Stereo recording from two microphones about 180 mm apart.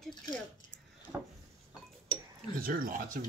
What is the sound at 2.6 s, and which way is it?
Speech, 50° right (ahead or behind).